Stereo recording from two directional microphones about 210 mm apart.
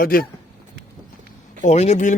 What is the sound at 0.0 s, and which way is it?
Speech, 45° left (ahead or behind).